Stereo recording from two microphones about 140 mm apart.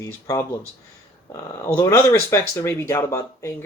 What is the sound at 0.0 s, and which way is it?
Speech, 20° left (ahead or behind).